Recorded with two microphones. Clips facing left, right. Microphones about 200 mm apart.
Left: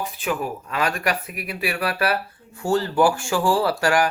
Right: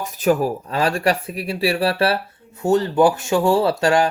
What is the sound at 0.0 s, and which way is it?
A man's voice, 40° right (ahead or behind).